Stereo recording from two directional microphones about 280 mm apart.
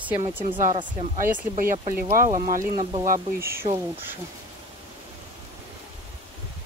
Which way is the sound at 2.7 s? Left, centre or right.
Centre.